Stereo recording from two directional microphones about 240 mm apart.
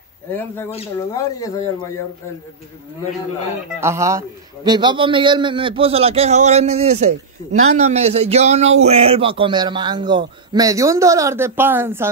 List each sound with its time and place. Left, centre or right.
0.3 s speech: centre
3.8 s a man's voice: centre